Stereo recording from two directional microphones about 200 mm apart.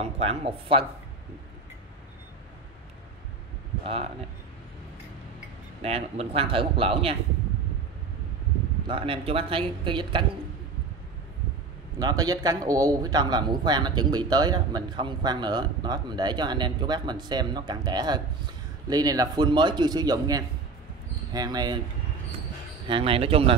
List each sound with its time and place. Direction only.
0.0 s speech: 30° right (ahead or behind)
3.8 s speech: 30° right (ahead or behind)
5.8 s speech: 30° right (ahead or behind)
8.8 s speech: 25° right (ahead or behind)
12.0 s speech: 20° right (ahead or behind)
22.8 s speech: 25° right (ahead or behind)